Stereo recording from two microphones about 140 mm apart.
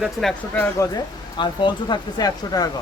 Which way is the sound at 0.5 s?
20° left (ahead or behind).